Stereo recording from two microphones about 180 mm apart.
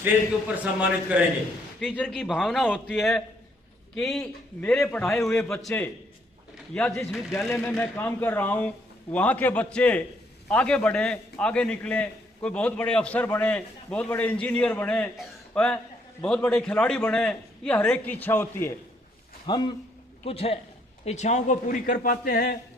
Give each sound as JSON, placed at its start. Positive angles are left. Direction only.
{"t": 0.5, "sound": "a man's voice", "side_deg": -5}
{"t": 19.5, "sound": "a man's voice", "side_deg": 25}